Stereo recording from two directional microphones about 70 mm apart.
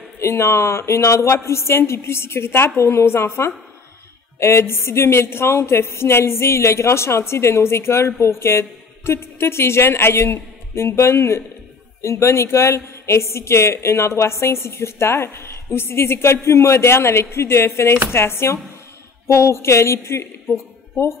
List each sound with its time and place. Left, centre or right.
0.2 s a woman's voice: left